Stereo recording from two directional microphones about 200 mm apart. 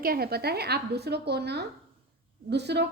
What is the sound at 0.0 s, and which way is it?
A woman's voice, 50° right (ahead or behind).